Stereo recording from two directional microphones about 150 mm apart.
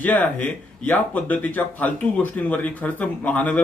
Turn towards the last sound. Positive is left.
turn(degrees=10)  # may be behind; listen again after turning